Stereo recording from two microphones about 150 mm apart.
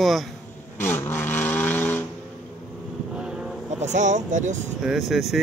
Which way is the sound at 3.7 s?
55° right (ahead or behind).